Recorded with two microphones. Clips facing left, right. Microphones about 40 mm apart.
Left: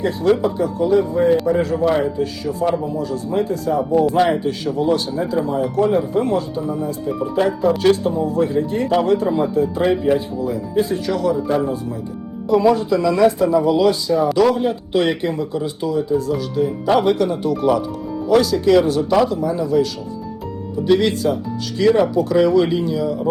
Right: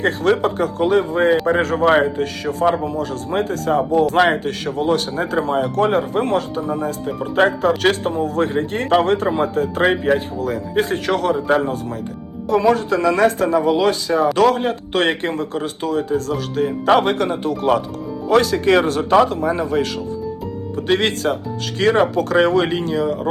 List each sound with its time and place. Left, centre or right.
0.0 s a man's voice: right